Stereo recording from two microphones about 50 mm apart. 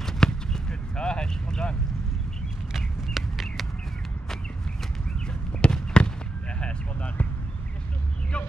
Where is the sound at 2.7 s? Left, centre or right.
Centre.